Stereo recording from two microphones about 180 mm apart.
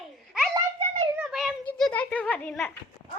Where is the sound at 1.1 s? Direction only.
5° right (ahead or behind).